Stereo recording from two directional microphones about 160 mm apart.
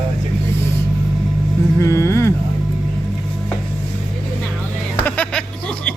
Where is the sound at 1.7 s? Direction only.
15° left (ahead or behind).